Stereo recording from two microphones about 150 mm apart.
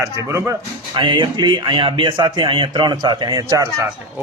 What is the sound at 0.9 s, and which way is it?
A man's voice, 30° right (ahead or behind).